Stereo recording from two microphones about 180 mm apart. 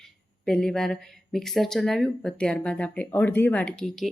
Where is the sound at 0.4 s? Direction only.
5° left (ahead or behind).